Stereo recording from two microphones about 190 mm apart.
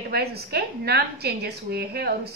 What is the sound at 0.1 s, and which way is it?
A woman's voice, 55° right (ahead or behind).